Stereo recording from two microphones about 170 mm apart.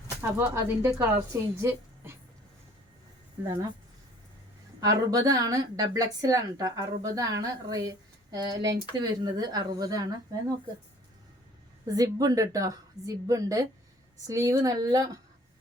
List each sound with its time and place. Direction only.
0.2 s a woman's voice: 15° right (ahead or behind)
4.8 s a woman's voice: 20° right (ahead or behind)
11.9 s a woman's voice: 20° right (ahead or behind)